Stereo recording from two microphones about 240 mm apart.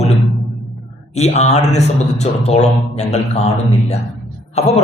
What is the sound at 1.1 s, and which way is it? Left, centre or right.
A man's voice, left.